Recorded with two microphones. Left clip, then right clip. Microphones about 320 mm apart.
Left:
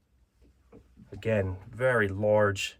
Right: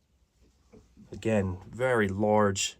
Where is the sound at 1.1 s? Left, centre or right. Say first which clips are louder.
Even; centre.